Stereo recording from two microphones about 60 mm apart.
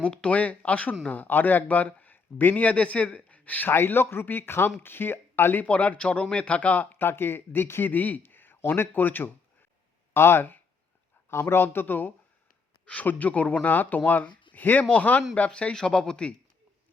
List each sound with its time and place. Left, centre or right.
0.0 s a man's voice: centre; by 5.6 s left
5.6 s a man's voice: left
6.9 s a man's voice: left; by 16.3 s centre